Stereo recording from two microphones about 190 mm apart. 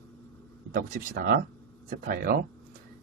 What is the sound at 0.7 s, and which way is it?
Speech, 45° right (ahead or behind).